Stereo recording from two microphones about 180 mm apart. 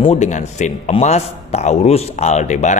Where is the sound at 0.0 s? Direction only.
40° left (ahead or behind).